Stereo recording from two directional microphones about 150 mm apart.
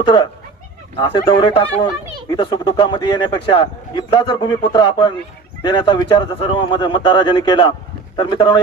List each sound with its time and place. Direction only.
0.0 s a man's voice: 30° left (ahead or behind)